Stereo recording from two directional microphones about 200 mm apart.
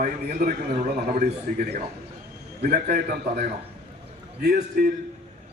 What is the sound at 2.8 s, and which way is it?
Speech, 50° right (ahead or behind).